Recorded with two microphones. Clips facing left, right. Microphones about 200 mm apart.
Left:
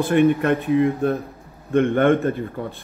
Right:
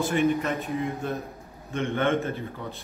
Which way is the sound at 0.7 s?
70° left (ahead or behind).